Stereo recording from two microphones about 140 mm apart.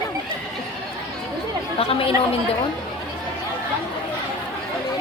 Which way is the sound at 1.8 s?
45° left (ahead or behind).